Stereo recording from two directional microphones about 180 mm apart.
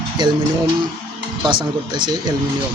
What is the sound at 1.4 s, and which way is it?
Speech, 25° right (ahead or behind).